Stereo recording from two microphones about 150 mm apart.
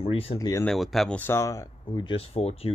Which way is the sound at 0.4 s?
25° left (ahead or behind).